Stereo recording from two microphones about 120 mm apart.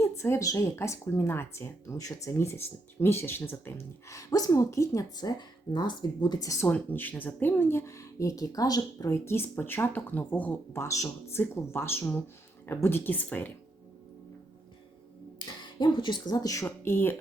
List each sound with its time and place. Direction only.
0.0 s speech: 25° left (ahead or behind)
4.1 s speech: 30° left (ahead or behind)
6.7 s speech: 15° left (ahead or behind)
10.8 s speech: 25° left (ahead or behind)
15.4 s speech: 40° left (ahead or behind)
16.6 s speech: 20° left (ahead or behind)